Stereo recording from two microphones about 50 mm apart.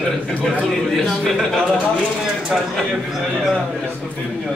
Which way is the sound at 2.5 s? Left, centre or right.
Centre.